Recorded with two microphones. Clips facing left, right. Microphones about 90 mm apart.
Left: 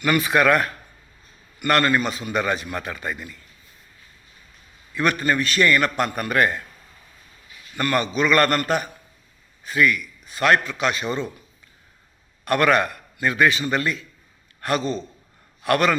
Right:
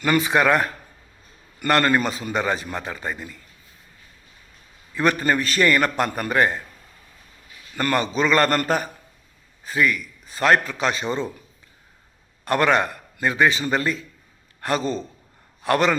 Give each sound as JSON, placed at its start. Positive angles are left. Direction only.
{"t": 0.0, "sound": "speech", "side_deg": -30}
{"t": 1.5, "sound": "a man's voice", "side_deg": -35}
{"t": 4.9, "sound": "a man's voice", "side_deg": -35}
{"t": 7.8, "sound": "a man's voice", "side_deg": -35}
{"t": 12.5, "sound": "a man's voice", "side_deg": -25}